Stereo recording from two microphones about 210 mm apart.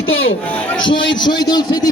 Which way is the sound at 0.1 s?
70° left (ahead or behind).